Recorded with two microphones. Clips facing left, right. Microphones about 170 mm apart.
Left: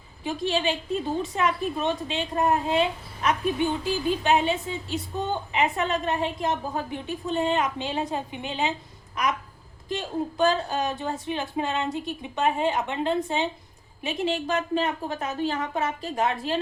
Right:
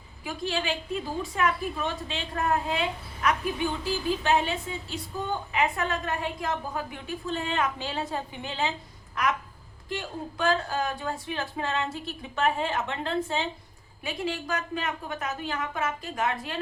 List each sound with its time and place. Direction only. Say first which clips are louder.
0.3 s a woman's voice: left 4 dB; 25° left (ahead or behind)
9.9 s a woman's voice: left 5 dB; 20° left (ahead or behind)